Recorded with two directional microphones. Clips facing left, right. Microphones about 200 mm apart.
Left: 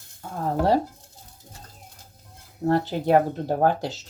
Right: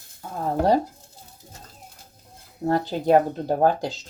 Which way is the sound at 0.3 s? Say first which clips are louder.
Right 1 dB; 5° right (ahead or behind).